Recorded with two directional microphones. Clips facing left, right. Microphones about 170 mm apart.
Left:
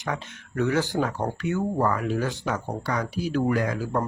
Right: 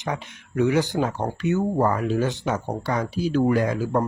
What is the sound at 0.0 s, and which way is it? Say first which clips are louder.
Speech: right 2 dB; 15° right (ahead or behind).